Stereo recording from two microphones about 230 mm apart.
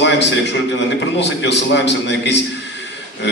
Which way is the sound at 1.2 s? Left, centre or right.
Left.